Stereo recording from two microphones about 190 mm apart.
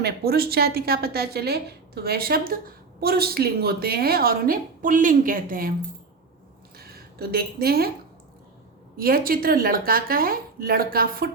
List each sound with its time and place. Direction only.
0.0 s a woman's voice: 55° right (ahead or behind)
6.7 s a sound: 55° right (ahead or behind)
9.0 s a woman's voice: 50° right (ahead or behind)